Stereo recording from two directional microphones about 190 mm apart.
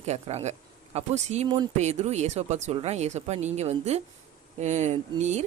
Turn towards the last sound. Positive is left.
turn(degrees=-35)  # may be behind; listen again after turning